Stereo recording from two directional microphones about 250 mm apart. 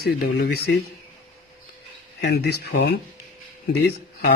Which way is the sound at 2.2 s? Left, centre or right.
Left.